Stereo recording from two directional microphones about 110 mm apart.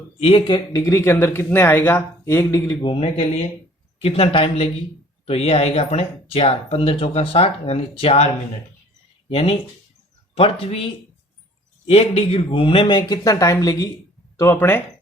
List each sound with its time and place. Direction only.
0.2 s speech: 55° left (ahead or behind)
0.9 s speech: 25° left (ahead or behind)
2.8 s speech: 55° left (ahead or behind)
9.3 s speech: 60° left (ahead or behind)
11.9 s speech: 60° left (ahead or behind); by 13.9 s 30° left (ahead or behind)
14.3 s speech: 20° left (ahead or behind)